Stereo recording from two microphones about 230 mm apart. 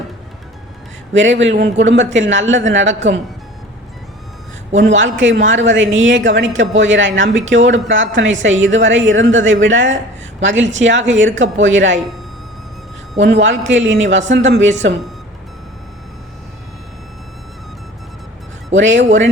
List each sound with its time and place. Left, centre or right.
1.1 s a woman's voice: right
4.7 s a woman's voice: right
13.2 s a woman's voice: right
18.7 s speech: right